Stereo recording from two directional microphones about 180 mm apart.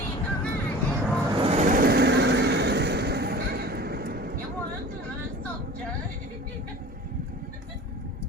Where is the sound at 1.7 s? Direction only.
60° right (ahead or behind).